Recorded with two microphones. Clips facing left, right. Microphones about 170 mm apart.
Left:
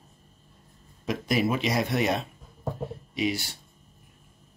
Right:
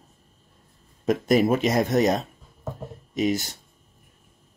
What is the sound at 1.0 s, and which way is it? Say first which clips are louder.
Speech: right 6 dB; 45° right (ahead or behind).